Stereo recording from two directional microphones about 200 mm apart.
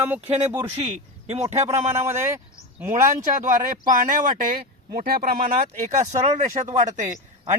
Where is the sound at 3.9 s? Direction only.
40° right (ahead or behind).